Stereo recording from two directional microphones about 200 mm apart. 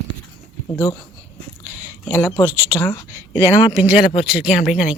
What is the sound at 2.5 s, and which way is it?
Speech, 10° right (ahead or behind).